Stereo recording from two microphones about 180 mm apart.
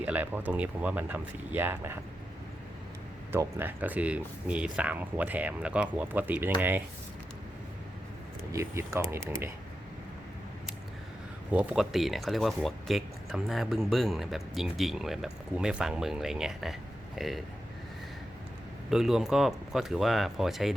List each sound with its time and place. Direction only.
0.0 s speech: 10° right (ahead or behind)
3.3 s speech: 10° right (ahead or behind)
8.5 s speech: 15° right (ahead or behind)
11.5 s speech: 5° right (ahead or behind)
18.9 s speech: centre (ahead or behind)